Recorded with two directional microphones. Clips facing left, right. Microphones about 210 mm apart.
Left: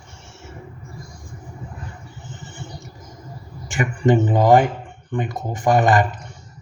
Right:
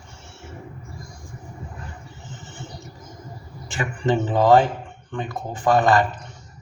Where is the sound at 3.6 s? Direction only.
15° left (ahead or behind).